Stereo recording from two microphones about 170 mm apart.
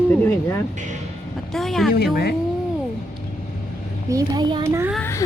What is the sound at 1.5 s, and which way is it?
Speech, centre (ahead or behind).